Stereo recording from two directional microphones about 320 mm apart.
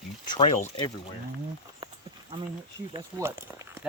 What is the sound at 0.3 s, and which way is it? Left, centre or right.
Speech, centre.